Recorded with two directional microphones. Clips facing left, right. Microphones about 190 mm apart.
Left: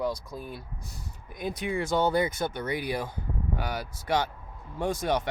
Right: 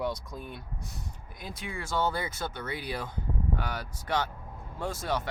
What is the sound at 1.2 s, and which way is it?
Speech, 20° left (ahead or behind).